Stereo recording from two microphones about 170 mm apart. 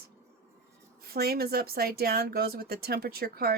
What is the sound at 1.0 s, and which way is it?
Speech, 65° right (ahead or behind).